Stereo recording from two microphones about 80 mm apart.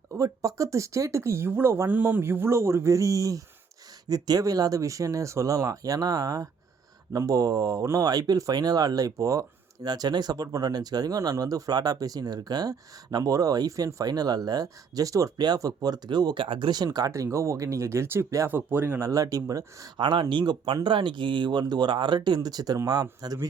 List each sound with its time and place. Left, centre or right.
0.2 s speech: right
9.8 s speech: right
16.0 s speech: right
17.1 s speech: right
18.4 s speech: right
18.9 s speech: right
20.0 s speech: right
20.8 s speech: right
22.4 s speech: right